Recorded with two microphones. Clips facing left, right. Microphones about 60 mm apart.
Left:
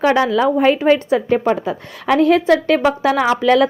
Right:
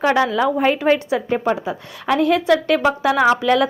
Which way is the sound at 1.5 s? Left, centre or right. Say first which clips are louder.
Left 3 dB; left.